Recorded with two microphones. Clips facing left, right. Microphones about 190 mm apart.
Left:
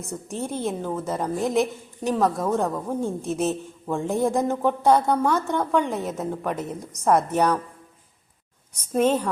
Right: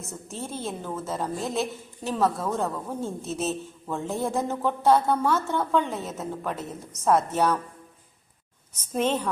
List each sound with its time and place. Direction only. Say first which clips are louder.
0.3 s a woman's voice: left 6 dB; 15° left (ahead or behind)
8.7 s a woman's voice: left 5 dB; 10° left (ahead or behind)